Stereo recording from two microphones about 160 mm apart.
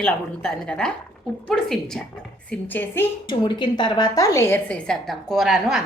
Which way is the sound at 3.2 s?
30° left (ahead or behind).